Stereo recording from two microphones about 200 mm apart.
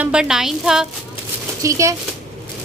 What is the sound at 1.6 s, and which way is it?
Speech, 15° right (ahead or behind).